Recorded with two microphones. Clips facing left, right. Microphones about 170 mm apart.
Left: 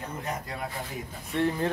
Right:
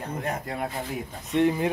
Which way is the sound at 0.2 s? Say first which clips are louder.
Right 5 dB; 55° right (ahead or behind).